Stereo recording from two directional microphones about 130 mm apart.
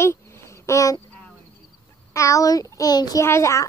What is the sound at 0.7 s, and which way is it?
Speech, 25° left (ahead or behind).